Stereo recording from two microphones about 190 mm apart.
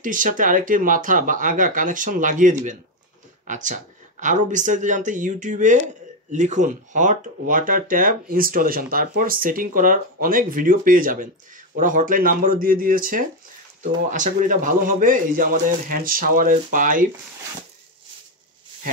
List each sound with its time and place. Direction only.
0.0 s speech: 45° right (ahead or behind)